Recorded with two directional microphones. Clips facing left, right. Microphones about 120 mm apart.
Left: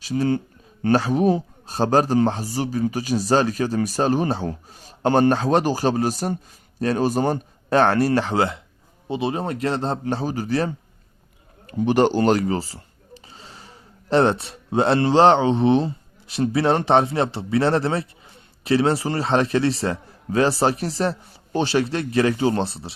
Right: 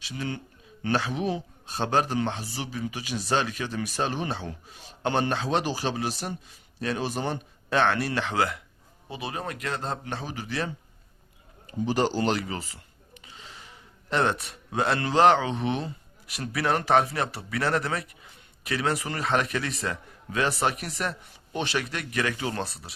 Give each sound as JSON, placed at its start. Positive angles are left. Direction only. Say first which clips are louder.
{"t": 0.0, "sound": "speech", "louder": "left 12 dB", "side_deg": 40}
{"t": 11.6, "sound": "speech", "louder": "left 7 dB", "side_deg": 60}